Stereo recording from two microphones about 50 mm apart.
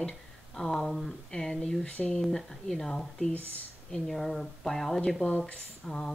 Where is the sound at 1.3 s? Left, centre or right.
Centre.